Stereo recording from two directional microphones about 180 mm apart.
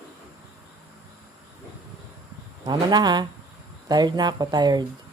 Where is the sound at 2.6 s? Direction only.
20° right (ahead or behind).